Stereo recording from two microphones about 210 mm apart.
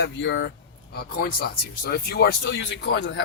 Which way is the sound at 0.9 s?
45° left (ahead or behind).